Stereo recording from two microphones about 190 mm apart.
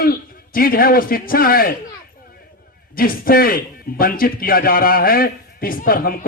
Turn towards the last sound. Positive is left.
turn(degrees=50)  # may be behind; listen again after turning